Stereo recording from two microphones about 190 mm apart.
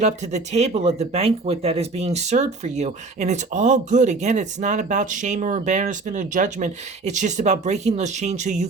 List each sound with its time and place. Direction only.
0.0 s speech: 35° right (ahead or behind)